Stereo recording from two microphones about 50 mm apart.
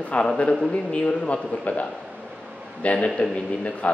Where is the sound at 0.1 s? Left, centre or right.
Left.